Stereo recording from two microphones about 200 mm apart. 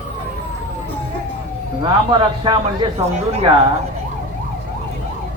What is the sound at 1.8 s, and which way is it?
A man's voice, 25° right (ahead or behind).